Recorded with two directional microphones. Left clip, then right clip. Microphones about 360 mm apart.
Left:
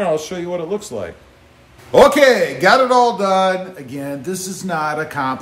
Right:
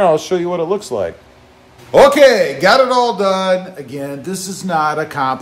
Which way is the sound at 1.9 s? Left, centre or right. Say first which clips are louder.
Right 2 dB; centre.